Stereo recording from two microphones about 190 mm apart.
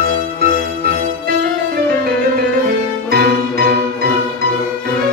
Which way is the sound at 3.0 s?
55° right (ahead or behind).